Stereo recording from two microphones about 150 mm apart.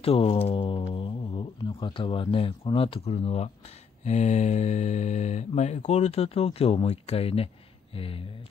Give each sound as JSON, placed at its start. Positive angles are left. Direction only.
{"t": 0.0, "sound": "speech", "side_deg": 40}